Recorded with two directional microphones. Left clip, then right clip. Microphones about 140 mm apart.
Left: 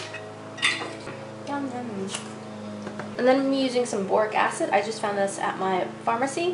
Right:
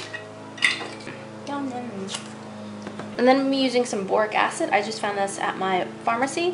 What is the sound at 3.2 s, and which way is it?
A woman's voice, 20° right (ahead or behind).